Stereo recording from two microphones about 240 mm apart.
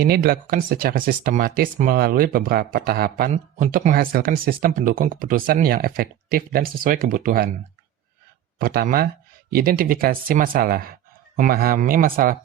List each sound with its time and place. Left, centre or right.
0.0 s speech: right
8.5 s speech: right